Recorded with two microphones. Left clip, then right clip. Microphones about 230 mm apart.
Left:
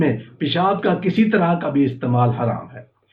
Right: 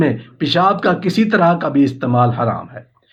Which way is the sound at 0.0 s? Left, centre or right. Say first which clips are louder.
Right 3 dB; right.